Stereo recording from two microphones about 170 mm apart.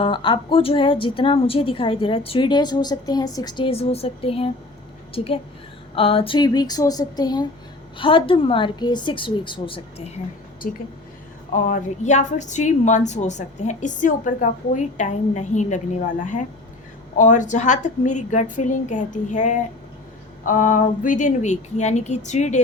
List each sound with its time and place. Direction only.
0.0 s a woman's voice: 30° left (ahead or behind)
11.5 s a woman's voice: 45° left (ahead or behind)